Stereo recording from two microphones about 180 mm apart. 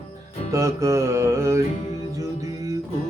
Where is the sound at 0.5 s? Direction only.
15° right (ahead or behind).